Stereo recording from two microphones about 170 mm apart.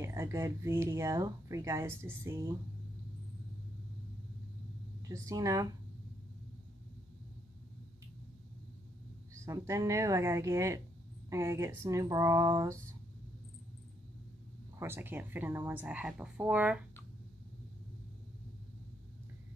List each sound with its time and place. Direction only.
0.0 s speech: 15° right (ahead or behind)
5.0 s speech: 20° right (ahead or behind)
9.3 s speech: 15° right (ahead or behind)
14.8 s speech: 15° right (ahead or behind)